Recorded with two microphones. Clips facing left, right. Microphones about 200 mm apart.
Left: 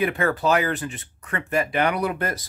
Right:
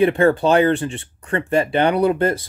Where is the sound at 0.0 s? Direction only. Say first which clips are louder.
Right 7 dB; 30° right (ahead or behind).